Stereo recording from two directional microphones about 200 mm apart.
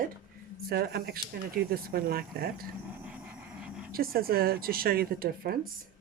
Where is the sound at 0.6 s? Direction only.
50° right (ahead or behind).